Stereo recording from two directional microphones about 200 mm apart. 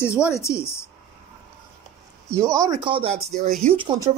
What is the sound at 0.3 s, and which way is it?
Speech, 15° left (ahead or behind).